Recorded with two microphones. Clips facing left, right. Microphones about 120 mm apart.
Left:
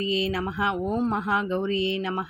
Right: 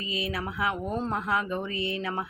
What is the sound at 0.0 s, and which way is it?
Speech, 25° left (ahead or behind).